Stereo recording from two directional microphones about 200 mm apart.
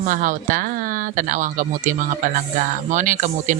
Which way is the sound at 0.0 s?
40° right (ahead or behind).